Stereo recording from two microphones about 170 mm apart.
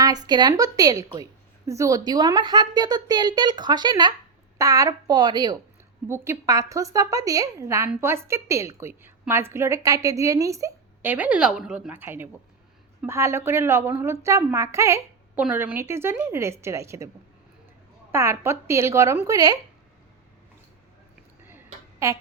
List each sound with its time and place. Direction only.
0.0 s a woman's voice: 25° right (ahead or behind)
6.1 s a woman's voice: 15° right (ahead or behind)
18.1 s a woman's voice: 15° right (ahead or behind)
21.4 s a sound: 15° right (ahead or behind)